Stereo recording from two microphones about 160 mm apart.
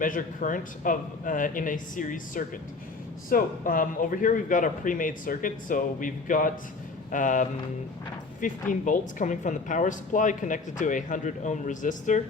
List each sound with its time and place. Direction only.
0.0 s a woman's voice: 55° left (ahead or behind)